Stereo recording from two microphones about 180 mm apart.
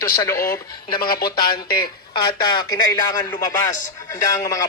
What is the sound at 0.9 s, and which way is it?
Speech, 55° left (ahead or behind).